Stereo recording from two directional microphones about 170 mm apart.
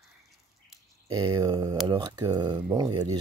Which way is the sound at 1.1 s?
20° right (ahead or behind).